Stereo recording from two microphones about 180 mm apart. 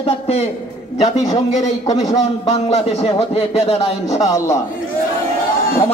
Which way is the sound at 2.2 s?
35° left (ahead or behind).